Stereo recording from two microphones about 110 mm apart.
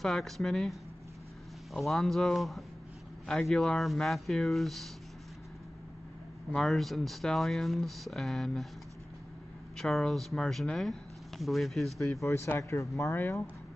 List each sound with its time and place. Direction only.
0.0 s speech: 5° left (ahead or behind)
6.5 s speech: 5° left (ahead or behind)
9.8 s speech: 5° left (ahead or behind)
12.0 s speech: 25° left (ahead or behind)